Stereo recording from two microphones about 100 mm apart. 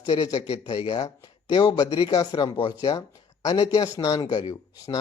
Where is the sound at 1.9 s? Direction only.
55° left (ahead or behind).